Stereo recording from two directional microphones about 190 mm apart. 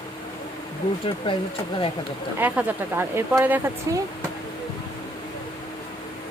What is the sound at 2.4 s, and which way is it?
Speech, 10° right (ahead or behind).